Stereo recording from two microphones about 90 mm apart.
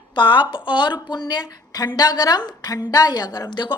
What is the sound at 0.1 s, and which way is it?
A woman's voice, 60° left (ahead or behind).